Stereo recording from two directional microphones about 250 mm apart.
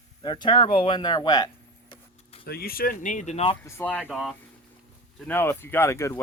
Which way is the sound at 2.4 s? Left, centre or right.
Left.